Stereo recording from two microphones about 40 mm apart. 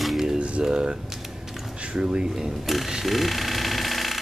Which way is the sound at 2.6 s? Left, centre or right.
Centre.